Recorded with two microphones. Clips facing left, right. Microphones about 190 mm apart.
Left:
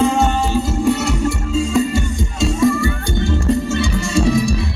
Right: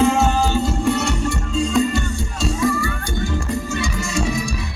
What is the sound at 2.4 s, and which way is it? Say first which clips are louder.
Music: left 5 dB; 25° left (ahead or behind).